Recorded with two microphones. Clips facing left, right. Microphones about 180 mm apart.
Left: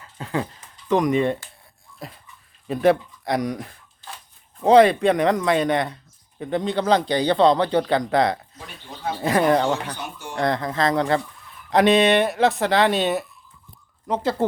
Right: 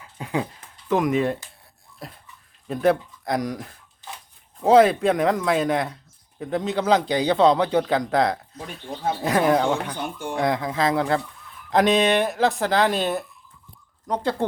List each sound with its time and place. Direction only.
0.0 s speech: 10° right (ahead or behind)
2.6 s a man's voice: centre (ahead or behind)
10.0 s speech: 50° right (ahead or behind)
10.3 s a man's voice: 5° right (ahead or behind)